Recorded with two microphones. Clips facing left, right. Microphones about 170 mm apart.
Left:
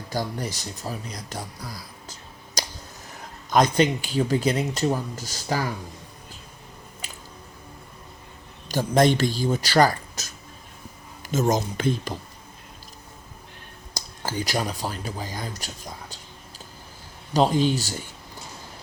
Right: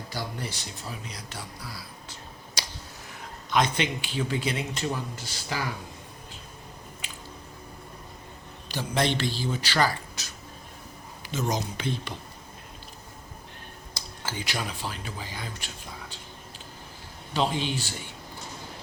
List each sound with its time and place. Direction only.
0.1 s speech: 45° left (ahead or behind)
2.6 s a sound: 40° left (ahead or behind)
3.5 s speech: 40° left (ahead or behind)
7.0 s squish: 40° left (ahead or behind)
8.7 s speech: 45° left (ahead or behind)
13.9 s speech: 40° left (ahead or behind)
17.3 s speech: 40° left (ahead or behind)